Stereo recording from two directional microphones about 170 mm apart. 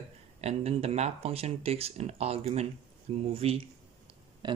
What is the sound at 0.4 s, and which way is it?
Speech, 35° right (ahead or behind).